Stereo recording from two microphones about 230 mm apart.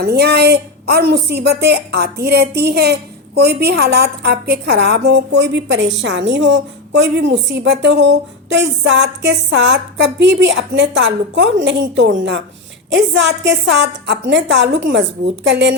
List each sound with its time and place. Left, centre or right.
0.0 s a woman's voice: right